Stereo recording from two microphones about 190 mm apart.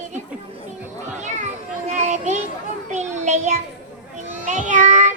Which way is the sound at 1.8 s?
35° right (ahead or behind).